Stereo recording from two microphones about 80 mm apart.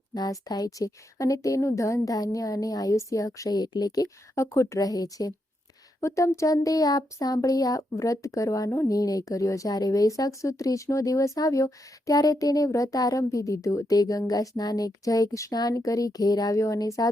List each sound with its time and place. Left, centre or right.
0.1 s speech: left
4.4 s speech: left